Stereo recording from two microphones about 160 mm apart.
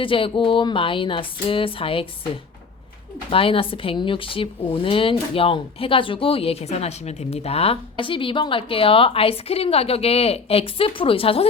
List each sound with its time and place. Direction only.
0.0 s speech: 35° left (ahead or behind)
3.2 s speech: 35° left (ahead or behind)